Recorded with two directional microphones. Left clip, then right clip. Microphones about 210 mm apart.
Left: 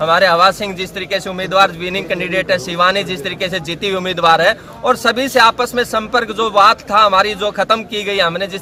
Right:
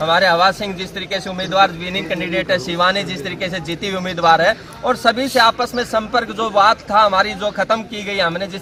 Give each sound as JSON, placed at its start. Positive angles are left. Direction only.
{"t": 0.0, "sound": "speech", "side_deg": 20}